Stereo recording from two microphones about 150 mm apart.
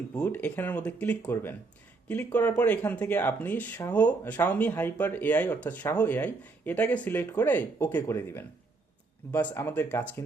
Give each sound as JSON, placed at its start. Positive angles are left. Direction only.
{"t": 0.2, "sound": "speech", "side_deg": 10}